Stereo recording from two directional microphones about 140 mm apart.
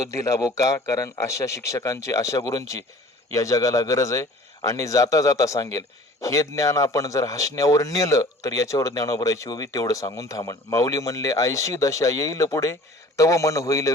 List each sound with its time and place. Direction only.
0.0 s speech: 20° left (ahead or behind)